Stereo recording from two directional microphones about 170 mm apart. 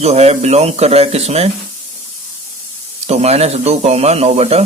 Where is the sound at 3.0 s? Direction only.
40° right (ahead or behind).